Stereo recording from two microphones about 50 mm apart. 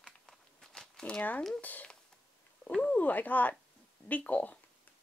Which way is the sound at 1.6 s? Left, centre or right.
Left.